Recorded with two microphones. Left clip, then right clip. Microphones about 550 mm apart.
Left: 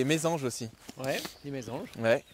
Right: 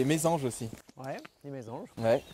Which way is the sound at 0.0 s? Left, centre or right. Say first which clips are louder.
Even; left.